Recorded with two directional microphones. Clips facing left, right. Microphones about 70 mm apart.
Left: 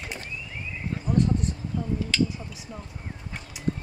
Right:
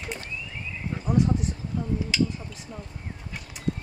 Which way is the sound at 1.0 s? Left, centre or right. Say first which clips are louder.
Right 1 dB; centre.